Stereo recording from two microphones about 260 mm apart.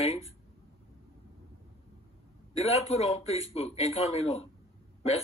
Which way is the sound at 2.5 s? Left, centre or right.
Left.